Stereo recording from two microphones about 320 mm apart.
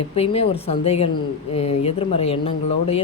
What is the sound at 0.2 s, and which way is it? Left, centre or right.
Speech, centre.